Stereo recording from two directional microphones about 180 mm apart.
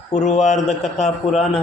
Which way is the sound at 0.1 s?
40° left (ahead or behind).